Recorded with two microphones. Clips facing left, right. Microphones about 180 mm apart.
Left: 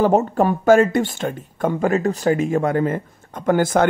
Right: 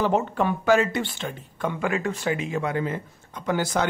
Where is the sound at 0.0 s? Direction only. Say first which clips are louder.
Left 6 dB; 45° left (ahead or behind).